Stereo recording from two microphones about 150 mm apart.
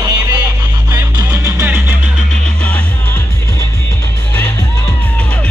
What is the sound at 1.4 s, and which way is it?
Music, 15° right (ahead or behind).